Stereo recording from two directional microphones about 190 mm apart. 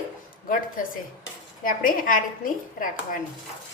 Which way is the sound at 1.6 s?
45° left (ahead or behind).